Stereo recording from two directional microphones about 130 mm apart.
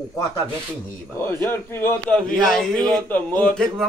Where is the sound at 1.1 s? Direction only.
20° left (ahead or behind).